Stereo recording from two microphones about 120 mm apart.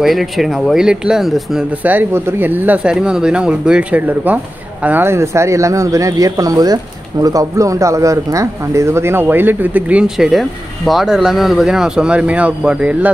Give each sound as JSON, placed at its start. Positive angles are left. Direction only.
{"t": 0.0, "sound": "speech", "side_deg": 0}
{"t": 1.8, "sound": "speech", "side_deg": -15}